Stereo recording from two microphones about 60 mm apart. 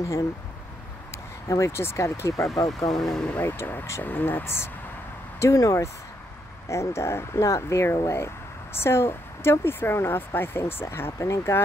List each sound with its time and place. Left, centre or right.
1.1 s speech: left
2.9 s speech: centre
3.4 s speech: left
5.4 s speech: left
11.1 s speech: left